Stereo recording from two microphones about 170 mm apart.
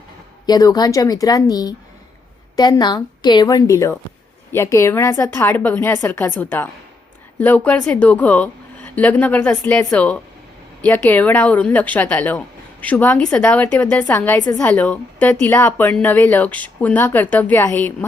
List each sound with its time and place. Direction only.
0.4 s a woman's voice: 25° left (ahead or behind)